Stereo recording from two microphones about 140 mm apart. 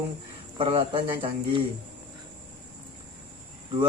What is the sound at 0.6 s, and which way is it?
Speech, 40° right (ahead or behind).